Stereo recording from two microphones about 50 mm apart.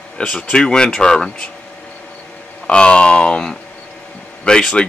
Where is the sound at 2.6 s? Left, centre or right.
Left.